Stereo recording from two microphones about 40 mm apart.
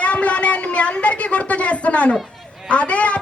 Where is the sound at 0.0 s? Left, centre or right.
Left.